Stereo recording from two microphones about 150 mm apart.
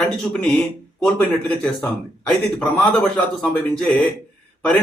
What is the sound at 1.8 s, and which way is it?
Speech, 5° left (ahead or behind).